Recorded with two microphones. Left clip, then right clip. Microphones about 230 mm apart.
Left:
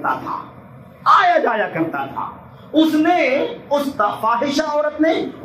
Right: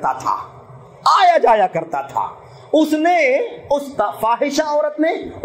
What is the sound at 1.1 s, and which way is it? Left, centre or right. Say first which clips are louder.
Speech: right 2 dB; right.